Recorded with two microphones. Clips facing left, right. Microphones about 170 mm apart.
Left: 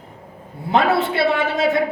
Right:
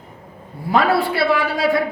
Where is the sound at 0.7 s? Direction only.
20° left (ahead or behind).